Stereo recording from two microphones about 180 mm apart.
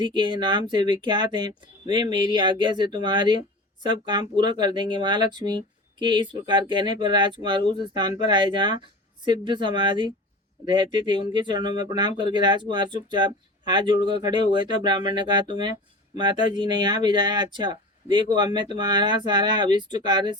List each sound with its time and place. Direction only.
0.0 s speech: 25° right (ahead or behind)